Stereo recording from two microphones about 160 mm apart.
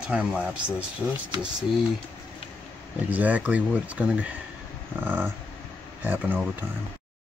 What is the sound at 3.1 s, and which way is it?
Speech, 10° right (ahead or behind).